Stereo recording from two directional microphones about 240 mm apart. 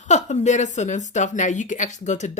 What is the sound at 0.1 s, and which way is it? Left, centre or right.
A woman's voice, left.